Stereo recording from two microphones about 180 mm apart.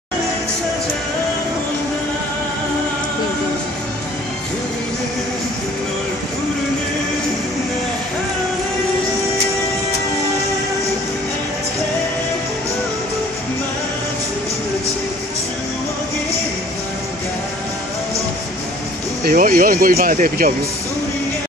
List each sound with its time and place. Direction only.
19.2 s speech: 50° right (ahead or behind)